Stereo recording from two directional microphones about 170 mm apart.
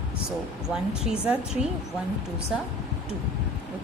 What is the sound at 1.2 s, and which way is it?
Speech, 10° right (ahead or behind).